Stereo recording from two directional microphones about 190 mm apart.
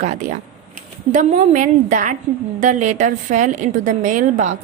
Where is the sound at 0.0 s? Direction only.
40° right (ahead or behind).